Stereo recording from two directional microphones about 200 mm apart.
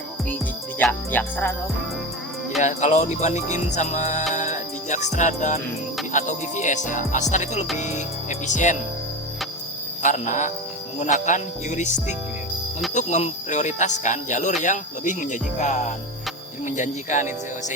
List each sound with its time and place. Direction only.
0.8 s speech: 10° left (ahead or behind)
2.6 s music: 35° left (ahead or behind)
10.0 s music: 40° left (ahead or behind)